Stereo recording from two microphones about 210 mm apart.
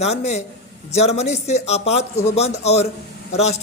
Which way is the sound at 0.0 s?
30° left (ahead or behind).